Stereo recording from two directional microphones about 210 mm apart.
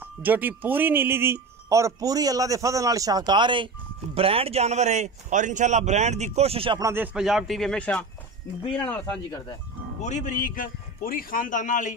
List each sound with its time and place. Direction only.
0.2 s speech: 10° right (ahead or behind); by 6.9 s 25° right (ahead or behind)
6.9 s a man's voice: 5° right (ahead or behind)
10.0 s a man's voice: 35° left (ahead or behind)